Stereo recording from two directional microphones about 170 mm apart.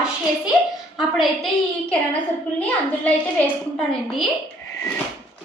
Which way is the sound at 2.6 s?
5° left (ahead or behind).